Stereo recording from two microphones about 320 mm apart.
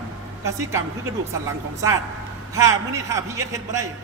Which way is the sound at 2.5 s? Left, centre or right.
Centre.